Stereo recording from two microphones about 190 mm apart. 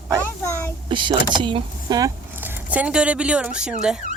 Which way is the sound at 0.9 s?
25° right (ahead or behind).